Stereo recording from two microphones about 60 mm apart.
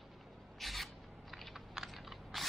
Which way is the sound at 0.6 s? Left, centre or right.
Centre.